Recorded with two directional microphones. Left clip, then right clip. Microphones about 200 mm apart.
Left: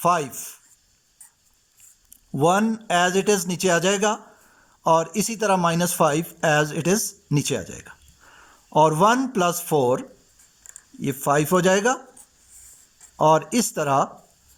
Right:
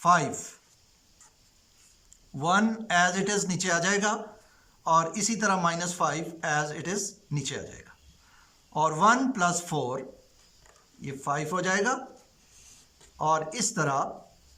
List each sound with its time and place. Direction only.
0.0 s a man's voice: 40° left (ahead or behind)
2.3 s a man's voice: 40° left (ahead or behind)
8.7 s a man's voice: 40° left (ahead or behind)
11.2 s a man's voice: 40° left (ahead or behind)
13.1 s a man's voice: 40° left (ahead or behind)